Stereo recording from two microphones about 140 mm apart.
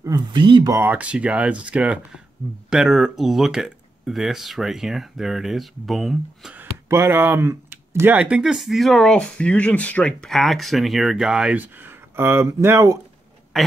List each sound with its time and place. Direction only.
0.0 s speech: 30° right (ahead or behind)
0.7 s speech: 15° right (ahead or behind); by 6.5 s centre (ahead or behind)
6.5 s speech: 15° right (ahead or behind)
13.5 s speech: centre (ahead or behind)